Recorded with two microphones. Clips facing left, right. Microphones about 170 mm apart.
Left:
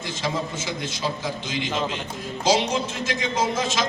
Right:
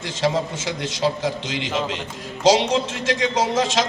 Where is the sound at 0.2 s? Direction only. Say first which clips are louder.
Right 7 dB; 80° right.